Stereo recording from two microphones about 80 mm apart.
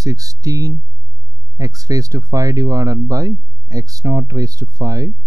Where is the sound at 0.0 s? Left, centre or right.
Right.